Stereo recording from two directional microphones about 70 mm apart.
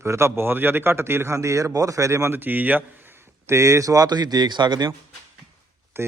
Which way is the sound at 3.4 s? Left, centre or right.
Right.